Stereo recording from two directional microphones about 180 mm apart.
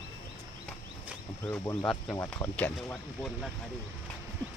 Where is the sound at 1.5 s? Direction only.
15° left (ahead or behind).